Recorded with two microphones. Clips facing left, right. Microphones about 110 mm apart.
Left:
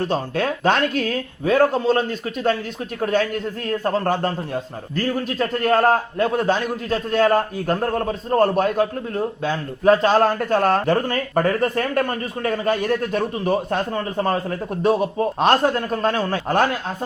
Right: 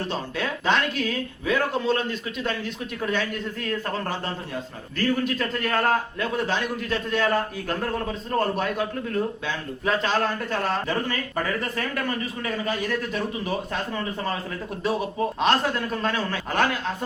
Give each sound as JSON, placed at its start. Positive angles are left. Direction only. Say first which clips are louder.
{"t": 0.1, "sound": "speech", "louder": "left 7 dB", "side_deg": 50}
{"t": 4.0, "sound": "a man's voice", "louder": "left 9 dB", "side_deg": 55}
{"t": 4.9, "sound": "a man's voice", "louder": "left 2 dB", "side_deg": 35}
{"t": 10.3, "sound": "speech", "louder": "left 8 dB", "side_deg": 55}
{"t": 15.4, "sound": "speech", "louder": "left 6 dB", "side_deg": 45}